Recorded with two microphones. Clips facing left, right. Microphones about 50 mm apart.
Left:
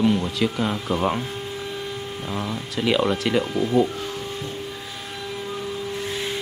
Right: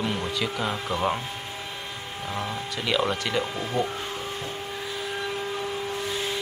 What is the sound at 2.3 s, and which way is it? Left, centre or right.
Speech, centre.